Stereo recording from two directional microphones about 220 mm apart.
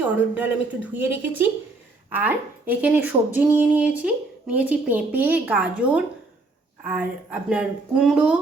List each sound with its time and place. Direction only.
0.0 s a woman's voice: 5° right (ahead or behind)